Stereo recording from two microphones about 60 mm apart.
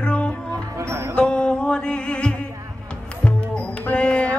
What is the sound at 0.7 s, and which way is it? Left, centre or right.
Music, right.